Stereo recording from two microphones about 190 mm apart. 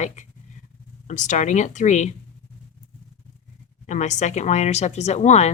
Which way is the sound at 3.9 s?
40° left (ahead or behind).